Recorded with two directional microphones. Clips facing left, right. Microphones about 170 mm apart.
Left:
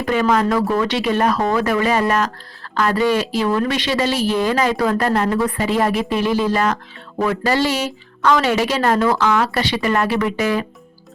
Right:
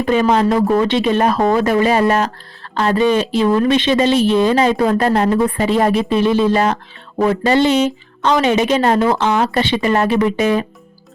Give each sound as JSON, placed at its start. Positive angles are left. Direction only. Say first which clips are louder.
{"t": 0.0, "sound": "speech", "louder": "right 3 dB", "side_deg": -25}